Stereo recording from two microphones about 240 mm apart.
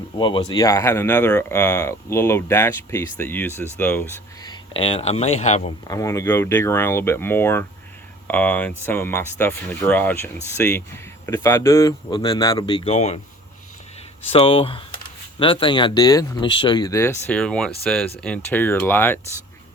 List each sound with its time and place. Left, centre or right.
0.2 s speech: centre
5.9 s speech: centre
14.3 s speech: left